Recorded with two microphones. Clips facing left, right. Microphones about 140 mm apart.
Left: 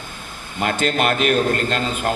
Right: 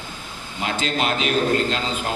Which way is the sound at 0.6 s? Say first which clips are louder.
Left 4 dB; 55° left (ahead or behind).